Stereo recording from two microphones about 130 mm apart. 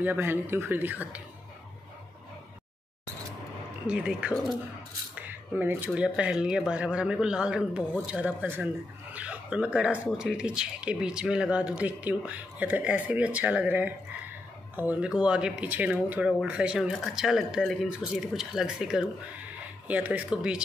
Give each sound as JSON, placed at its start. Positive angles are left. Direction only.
{"t": 0.0, "sound": "speech", "side_deg": -15}
{"t": 3.8, "sound": "speech", "side_deg": -10}
{"t": 5.1, "sound": "cutlery", "side_deg": -15}
{"t": 5.9, "sound": "speech", "side_deg": -5}